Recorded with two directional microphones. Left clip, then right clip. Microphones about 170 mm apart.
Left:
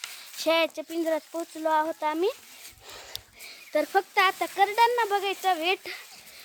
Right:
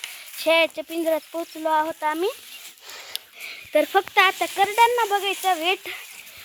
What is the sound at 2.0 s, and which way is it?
Speech, 5° left (ahead or behind).